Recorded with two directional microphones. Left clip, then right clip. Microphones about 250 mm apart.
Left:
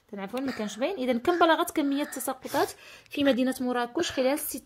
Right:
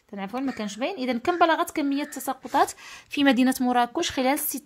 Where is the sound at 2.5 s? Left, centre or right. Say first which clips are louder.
Right 6 dB; right.